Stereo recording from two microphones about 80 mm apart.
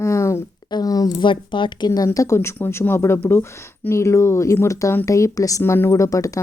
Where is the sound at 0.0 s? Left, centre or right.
Left.